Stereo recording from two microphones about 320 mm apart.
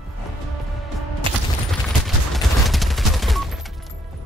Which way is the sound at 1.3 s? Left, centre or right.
Centre.